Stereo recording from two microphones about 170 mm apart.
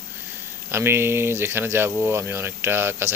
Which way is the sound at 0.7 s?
15° right (ahead or behind).